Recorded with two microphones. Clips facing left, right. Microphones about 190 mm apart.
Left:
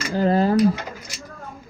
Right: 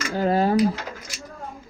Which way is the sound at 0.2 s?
5° right (ahead or behind).